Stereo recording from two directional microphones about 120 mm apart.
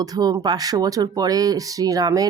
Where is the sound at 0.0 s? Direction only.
30° right (ahead or behind).